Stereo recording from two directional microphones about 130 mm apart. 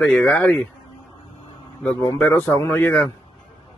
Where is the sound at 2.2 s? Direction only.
15° left (ahead or behind).